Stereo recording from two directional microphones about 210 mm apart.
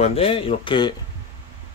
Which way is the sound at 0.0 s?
25° left (ahead or behind).